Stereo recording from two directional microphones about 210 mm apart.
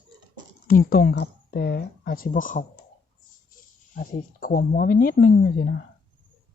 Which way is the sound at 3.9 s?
40° left (ahead or behind).